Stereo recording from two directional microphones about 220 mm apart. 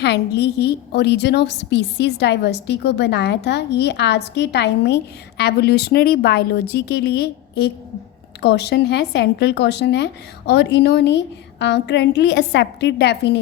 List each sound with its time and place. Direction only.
0.0 s speech: 50° left (ahead or behind)